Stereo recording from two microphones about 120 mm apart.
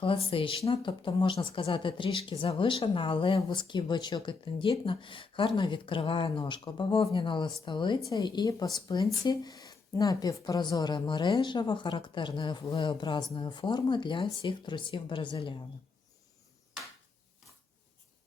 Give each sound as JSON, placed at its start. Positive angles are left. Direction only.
{"t": 0.0, "sound": "a woman's voice", "side_deg": 50}